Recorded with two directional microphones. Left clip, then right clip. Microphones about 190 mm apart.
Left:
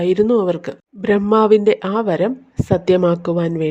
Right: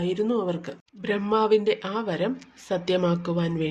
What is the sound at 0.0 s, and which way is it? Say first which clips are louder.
Speech: left 11 dB; 40° left (ahead or behind).